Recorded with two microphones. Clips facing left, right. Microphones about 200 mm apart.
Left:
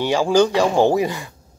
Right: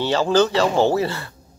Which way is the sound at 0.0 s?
10° left (ahead or behind).